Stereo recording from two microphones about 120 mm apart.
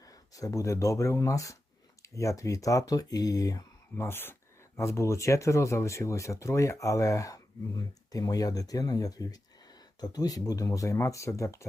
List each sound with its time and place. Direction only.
0.0 s speech: 30° left (ahead or behind)